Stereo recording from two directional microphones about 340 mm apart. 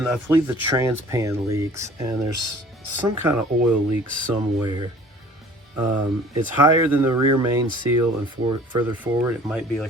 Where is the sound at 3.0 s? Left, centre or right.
Centre.